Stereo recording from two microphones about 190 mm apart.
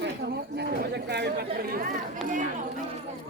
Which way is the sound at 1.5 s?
50° right (ahead or behind).